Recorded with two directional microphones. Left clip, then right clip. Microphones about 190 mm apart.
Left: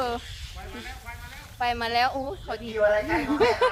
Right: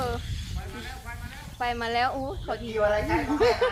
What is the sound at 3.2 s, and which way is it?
Speech, 70° left (ahead or behind).